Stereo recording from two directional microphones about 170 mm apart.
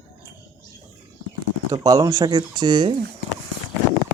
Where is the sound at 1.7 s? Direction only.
20° right (ahead or behind).